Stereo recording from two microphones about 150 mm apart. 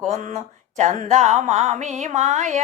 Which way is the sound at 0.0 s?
55° right (ahead or behind).